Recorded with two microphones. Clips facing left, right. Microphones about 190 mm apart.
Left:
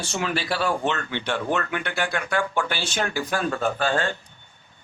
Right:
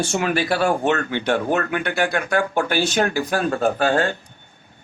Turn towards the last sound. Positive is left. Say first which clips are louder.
# right 5 dB
turn(degrees=-45)  # may be behind; listen again after turning